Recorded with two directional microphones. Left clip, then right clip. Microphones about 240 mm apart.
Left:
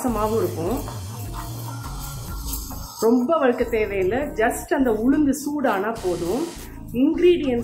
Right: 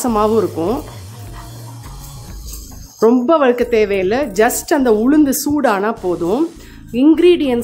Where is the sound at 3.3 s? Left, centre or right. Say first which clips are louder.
Right 7 dB; right.